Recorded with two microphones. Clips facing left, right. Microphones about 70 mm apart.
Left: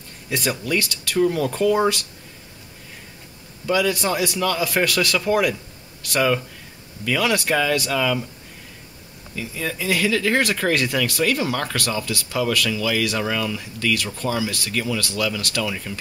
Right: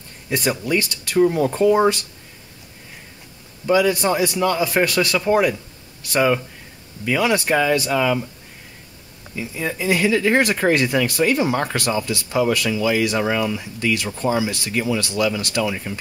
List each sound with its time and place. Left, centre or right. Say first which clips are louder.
0.3 s speech: right 3 dB; right
3.6 s speech: right 4 dB; right
9.3 s speech: right 2 dB; right